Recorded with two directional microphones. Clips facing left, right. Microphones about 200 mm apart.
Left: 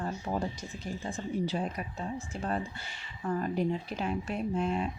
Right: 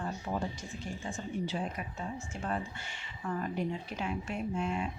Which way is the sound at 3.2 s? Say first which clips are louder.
Left 4 dB; 35° left (ahead or behind).